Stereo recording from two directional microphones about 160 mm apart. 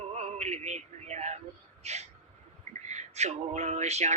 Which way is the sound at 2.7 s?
45° right (ahead or behind).